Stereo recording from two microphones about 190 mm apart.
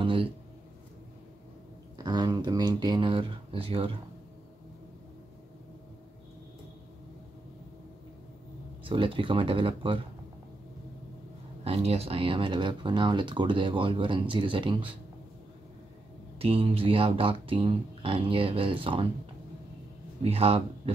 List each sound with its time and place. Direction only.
0.0 s a sound: 25° right (ahead or behind)
2.0 s speech: 20° right (ahead or behind)
8.8 s speech: 25° right (ahead or behind)
11.6 s speech: 30° right (ahead or behind)
16.3 s speech: 30° right (ahead or behind)
20.2 s speech: 30° right (ahead or behind)